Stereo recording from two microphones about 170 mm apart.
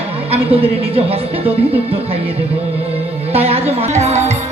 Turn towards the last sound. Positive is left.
turn(degrees=-40)  # may be behind; listen again after turning